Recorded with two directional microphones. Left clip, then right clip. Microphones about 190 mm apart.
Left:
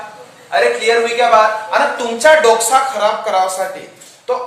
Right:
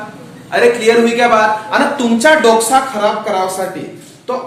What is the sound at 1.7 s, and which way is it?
A man's voice, centre (ahead or behind).